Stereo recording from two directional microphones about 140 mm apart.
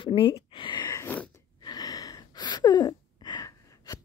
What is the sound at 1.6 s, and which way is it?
Gasp, 30° left (ahead or behind).